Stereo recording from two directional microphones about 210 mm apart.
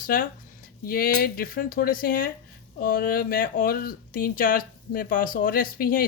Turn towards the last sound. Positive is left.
turn(degrees=45)  # may be behind; listen again after turning